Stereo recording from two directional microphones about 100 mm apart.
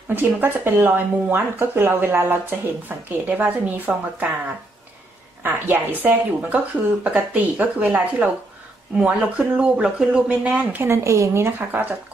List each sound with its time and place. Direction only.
0.1 s speech: 20° right (ahead or behind)
5.4 s a woman's voice: 20° right (ahead or behind)